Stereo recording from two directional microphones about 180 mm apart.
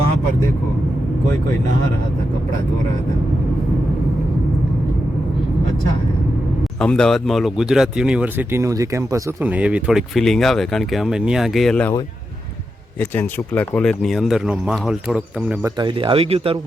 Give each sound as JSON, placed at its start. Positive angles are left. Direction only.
{"t": 6.7, "sound": "speech", "side_deg": 5}
{"t": 13.0, "sound": "speech", "side_deg": 10}
{"t": 15.6, "sound": "speech", "side_deg": -25}